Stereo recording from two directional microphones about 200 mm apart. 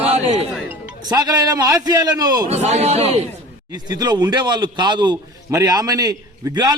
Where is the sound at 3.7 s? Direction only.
20° right (ahead or behind).